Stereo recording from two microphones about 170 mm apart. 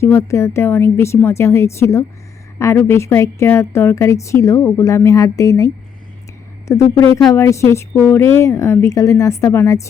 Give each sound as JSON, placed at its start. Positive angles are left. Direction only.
{"t": 0.0, "sound": "a woman's voice", "side_deg": 15}